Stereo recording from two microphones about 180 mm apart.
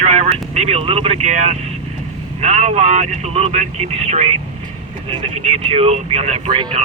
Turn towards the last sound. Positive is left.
turn(degrees=-30)  # may be behind; listen again after turning